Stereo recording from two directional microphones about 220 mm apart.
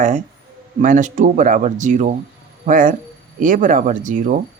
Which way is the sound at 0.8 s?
35° right (ahead or behind).